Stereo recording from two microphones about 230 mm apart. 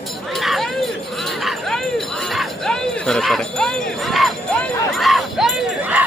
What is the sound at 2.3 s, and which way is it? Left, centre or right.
Music, centre.